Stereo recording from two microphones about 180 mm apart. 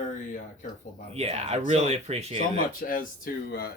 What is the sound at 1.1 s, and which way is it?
Speech, 35° right (ahead or behind).